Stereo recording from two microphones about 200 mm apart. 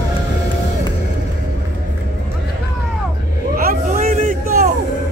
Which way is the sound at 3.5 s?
45° right (ahead or behind).